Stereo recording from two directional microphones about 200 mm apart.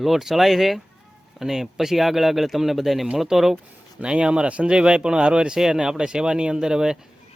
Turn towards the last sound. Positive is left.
turn(degrees=-5)  # may be behind; listen again after turning